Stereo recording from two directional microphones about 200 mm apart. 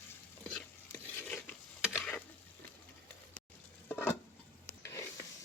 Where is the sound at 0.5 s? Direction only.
10° left (ahead or behind).